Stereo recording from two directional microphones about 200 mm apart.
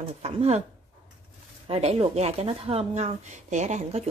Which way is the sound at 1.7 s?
30° right (ahead or behind).